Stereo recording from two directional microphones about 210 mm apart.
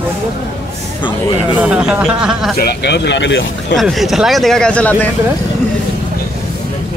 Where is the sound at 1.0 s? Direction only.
20° left (ahead or behind).